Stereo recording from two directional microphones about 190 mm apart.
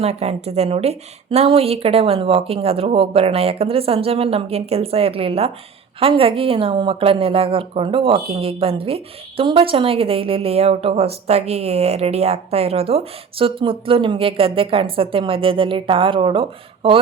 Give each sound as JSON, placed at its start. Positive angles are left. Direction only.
{"t": 0.0, "sound": "a woman's voice", "side_deg": -30}